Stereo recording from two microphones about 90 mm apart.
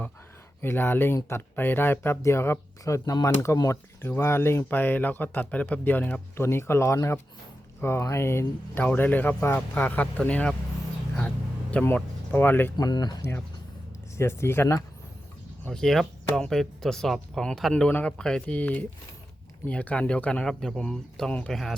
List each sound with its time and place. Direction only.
0.6 s speech: 25° left (ahead or behind)
6.3 s speech: 30° left (ahead or behind); by 10.5 s 10° left (ahead or behind)
11.9 s speech: 20° left (ahead or behind)
12.7 s speech: 50° left (ahead or behind)
14.2 s speech: 30° left (ahead or behind)
15.6 s speech: 5° left (ahead or behind)
20.5 s speech: 5° left (ahead or behind)